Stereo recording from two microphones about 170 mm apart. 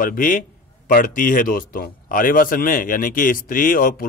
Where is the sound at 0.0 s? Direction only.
55° left (ahead or behind).